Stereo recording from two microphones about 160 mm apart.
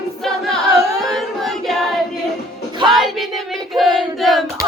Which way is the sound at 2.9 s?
Centre (ahead or behind).